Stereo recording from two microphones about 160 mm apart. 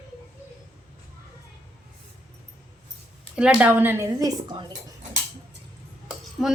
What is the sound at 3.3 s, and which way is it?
A woman's voice, 5° right (ahead or behind).